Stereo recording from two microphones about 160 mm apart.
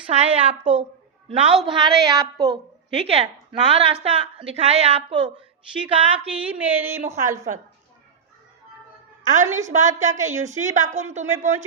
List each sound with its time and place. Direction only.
0.1 s a woman's voice: 40° right (ahead or behind); by 2.6 s 25° right (ahead or behind)
2.9 s speech: 40° right (ahead or behind)
5.7 s speech: 10° right (ahead or behind)
9.2 s a woman's voice: 50° right (ahead or behind)